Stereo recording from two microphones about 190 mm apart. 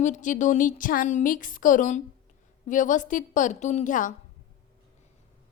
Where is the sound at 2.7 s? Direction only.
40° left (ahead or behind).